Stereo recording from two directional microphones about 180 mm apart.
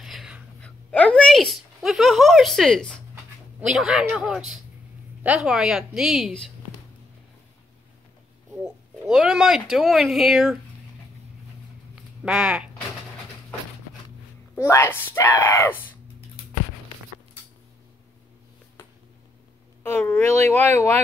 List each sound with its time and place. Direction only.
0.0 s a sound: centre (ahead or behind)
3.6 s a woman's voice: 5° right (ahead or behind)
8.6 s speech: 5° right (ahead or behind)
11.9 s a sound: 5° right (ahead or behind)
14.6 s speech: 15° left (ahead or behind)
19.8 s speech: 10° left (ahead or behind)